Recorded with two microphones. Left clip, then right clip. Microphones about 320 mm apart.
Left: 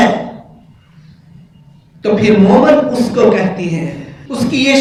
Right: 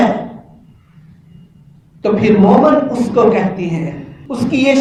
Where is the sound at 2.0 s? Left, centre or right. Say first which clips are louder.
Left 1 dB; centre.